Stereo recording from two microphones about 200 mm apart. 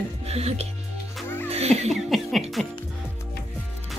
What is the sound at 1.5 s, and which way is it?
Music, 30° right (ahead or behind).